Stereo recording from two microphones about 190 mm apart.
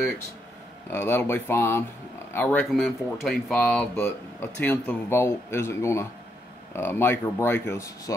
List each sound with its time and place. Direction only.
0.8 s speech: 10° left (ahead or behind)